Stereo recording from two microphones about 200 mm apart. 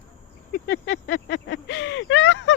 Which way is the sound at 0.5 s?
45° left (ahead or behind).